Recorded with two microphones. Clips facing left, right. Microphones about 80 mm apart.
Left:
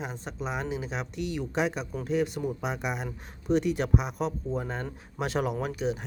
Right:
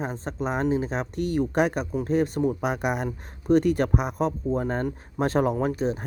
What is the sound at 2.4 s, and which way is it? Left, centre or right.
Speech, right.